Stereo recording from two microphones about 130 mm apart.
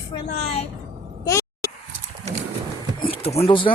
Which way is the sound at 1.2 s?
25° left (ahead or behind).